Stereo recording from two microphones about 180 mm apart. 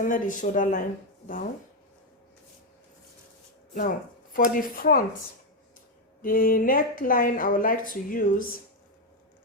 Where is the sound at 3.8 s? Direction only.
50° left (ahead or behind).